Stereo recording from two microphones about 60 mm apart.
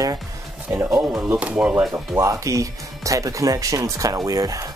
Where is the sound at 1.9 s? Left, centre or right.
Right.